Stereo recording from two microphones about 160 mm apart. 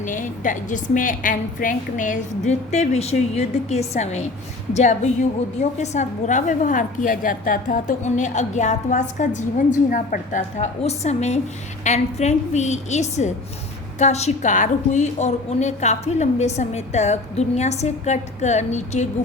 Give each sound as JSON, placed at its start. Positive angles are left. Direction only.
{"t": 0.1, "sound": "a woman's voice", "side_deg": 55}